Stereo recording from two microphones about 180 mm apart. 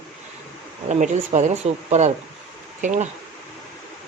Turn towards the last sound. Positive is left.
turn(degrees=-45)  # may be behind; listen again after turning